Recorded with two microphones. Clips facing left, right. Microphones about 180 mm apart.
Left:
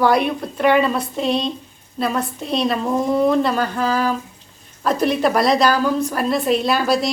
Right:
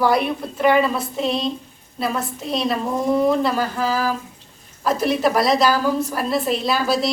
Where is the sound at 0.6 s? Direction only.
5° right (ahead or behind).